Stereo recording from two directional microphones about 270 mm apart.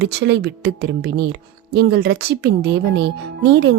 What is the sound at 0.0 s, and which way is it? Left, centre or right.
A woman's voice, right.